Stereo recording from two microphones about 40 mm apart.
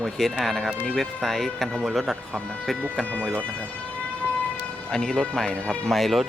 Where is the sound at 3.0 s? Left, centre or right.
Left.